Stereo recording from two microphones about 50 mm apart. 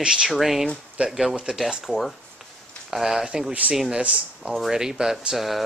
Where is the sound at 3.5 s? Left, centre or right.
Right.